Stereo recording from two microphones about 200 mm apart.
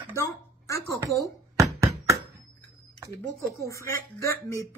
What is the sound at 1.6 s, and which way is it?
Knock, 15° right (ahead or behind).